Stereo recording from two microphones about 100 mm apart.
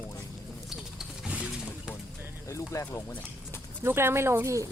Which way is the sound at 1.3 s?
10° right (ahead or behind).